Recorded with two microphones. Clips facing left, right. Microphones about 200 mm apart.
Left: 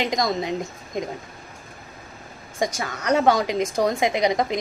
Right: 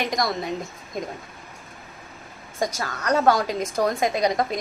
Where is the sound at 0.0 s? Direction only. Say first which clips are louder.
Left 2 dB; 20° left (ahead or behind).